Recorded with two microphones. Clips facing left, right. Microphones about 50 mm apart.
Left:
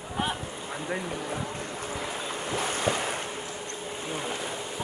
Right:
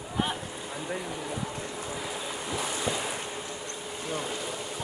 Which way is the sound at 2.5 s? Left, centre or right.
Left.